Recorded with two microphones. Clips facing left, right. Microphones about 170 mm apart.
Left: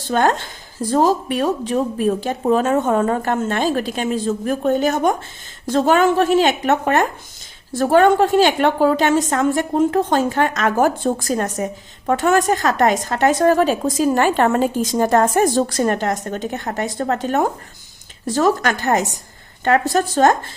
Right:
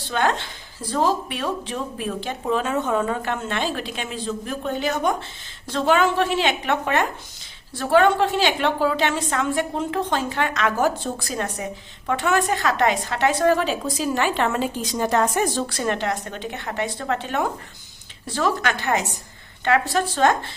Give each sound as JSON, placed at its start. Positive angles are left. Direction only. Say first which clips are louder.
{"t": 0.1, "sound": "a woman's voice", "louder": "left 5 dB", "side_deg": 45}